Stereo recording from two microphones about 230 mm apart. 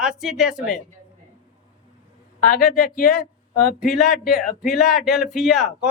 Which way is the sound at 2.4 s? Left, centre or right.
Left.